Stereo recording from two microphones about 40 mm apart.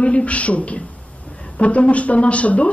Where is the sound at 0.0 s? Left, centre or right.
Left.